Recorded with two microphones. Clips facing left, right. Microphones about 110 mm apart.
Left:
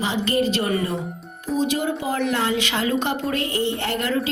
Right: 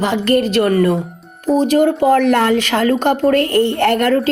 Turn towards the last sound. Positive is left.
turn(degrees=-55)  # may be behind; listen again after turning